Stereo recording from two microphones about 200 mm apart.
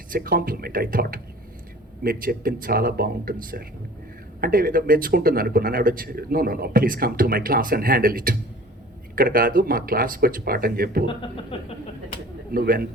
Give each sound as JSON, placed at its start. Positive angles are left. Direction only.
{"t": 0.1, "sound": "speech", "side_deg": -45}
{"t": 4.4, "sound": "speech", "side_deg": -45}
{"t": 11.5, "sound": "speech", "side_deg": 25}
{"t": 12.5, "sound": "speech", "side_deg": -45}